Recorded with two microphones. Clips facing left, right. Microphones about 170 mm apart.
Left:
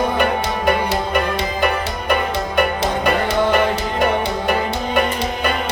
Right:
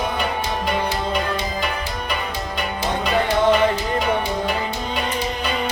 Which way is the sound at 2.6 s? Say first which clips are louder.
Left 6 dB; 55° left (ahead or behind).